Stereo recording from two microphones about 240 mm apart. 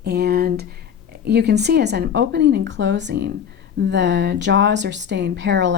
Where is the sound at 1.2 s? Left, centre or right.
Right.